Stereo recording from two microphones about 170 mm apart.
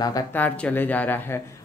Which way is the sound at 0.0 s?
20° left (ahead or behind).